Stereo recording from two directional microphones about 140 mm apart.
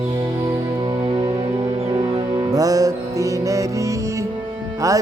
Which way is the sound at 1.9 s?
30° right (ahead or behind).